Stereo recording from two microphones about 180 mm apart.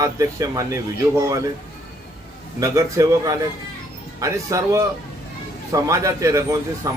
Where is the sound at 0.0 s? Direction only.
20° right (ahead or behind).